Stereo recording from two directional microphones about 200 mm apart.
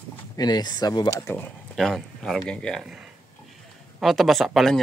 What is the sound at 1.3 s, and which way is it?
Speech, 5° left (ahead or behind).